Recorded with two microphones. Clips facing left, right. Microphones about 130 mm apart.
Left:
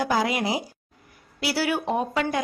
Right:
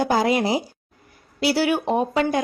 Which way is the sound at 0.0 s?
30° right (ahead or behind).